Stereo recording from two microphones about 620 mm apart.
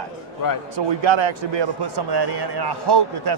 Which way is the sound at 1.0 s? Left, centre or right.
Right.